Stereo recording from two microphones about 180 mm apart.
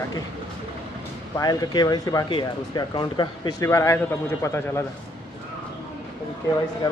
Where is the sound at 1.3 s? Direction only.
20° left (ahead or behind).